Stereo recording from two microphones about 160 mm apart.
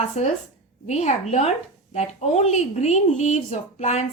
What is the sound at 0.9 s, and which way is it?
Speech, 45° left (ahead or behind).